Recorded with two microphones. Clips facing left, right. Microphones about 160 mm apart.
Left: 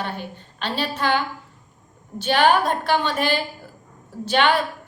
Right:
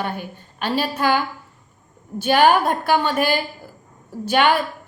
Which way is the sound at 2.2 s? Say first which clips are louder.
Right 2 dB; 10° right (ahead or behind).